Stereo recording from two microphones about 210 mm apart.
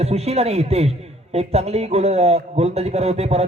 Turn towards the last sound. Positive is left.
turn(degrees=-30)  # may be behind; listen again after turning